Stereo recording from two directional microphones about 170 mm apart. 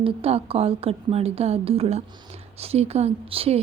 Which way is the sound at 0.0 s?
35° right (ahead or behind).